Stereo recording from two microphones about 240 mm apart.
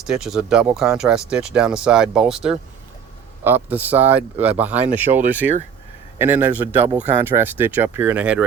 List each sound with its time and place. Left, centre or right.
0.0 s a man's voice: centre